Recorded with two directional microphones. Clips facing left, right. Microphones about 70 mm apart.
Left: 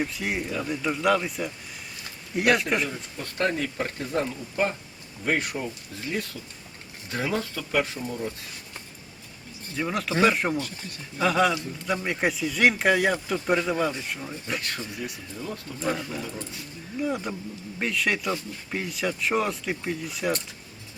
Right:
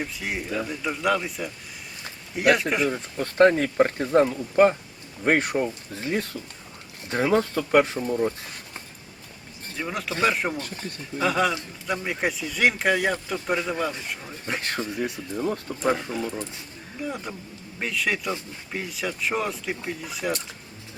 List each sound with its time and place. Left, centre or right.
0.0 s speech: centre
2.9 s speech: right
9.7 s speech: centre
14.5 s speech: right
14.8 s speech: right
17.0 s speech: centre